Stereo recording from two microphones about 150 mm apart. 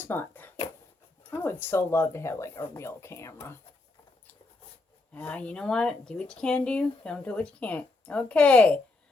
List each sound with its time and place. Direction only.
0.0 s a sound: 15° left (ahead or behind)
1.3 s speech: 15° left (ahead or behind)
5.1 s speech: 10° left (ahead or behind)